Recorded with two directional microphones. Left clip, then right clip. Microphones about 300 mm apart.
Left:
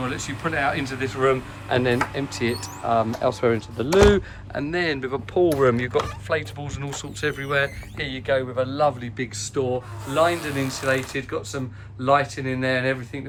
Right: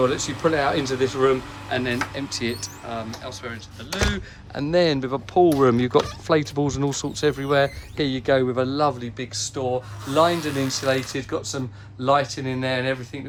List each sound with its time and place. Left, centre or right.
0.1 s speech: centre
3.2 s speech: centre
4.5 s speech: centre